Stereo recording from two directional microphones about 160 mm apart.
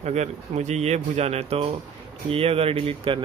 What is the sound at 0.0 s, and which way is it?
Speech, 45° right (ahead or behind).